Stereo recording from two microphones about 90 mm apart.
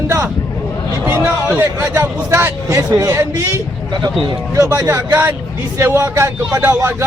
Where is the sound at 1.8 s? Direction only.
15° right (ahead or behind).